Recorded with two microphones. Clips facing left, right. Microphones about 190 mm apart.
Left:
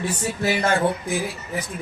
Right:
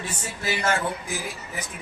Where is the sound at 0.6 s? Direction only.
35° left (ahead or behind).